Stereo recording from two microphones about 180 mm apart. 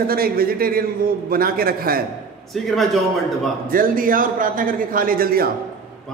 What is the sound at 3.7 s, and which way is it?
A man's voice, 50° right (ahead or behind).